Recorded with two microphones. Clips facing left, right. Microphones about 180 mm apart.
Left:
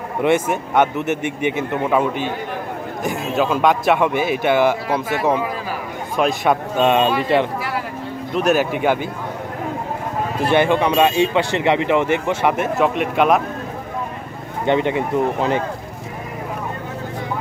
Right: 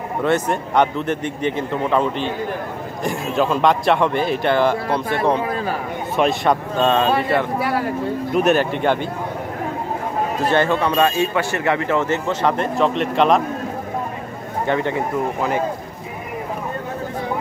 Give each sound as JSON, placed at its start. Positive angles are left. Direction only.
{"t": 0.2, "sound": "speech", "side_deg": 10}
{"t": 6.9, "sound": "speech", "side_deg": 20}
{"t": 8.3, "sound": "speech", "side_deg": -5}
{"t": 8.5, "sound": "speech", "side_deg": 10}
{"t": 10.5, "sound": "speech", "side_deg": 15}
{"t": 14.7, "sound": "speech", "side_deg": 20}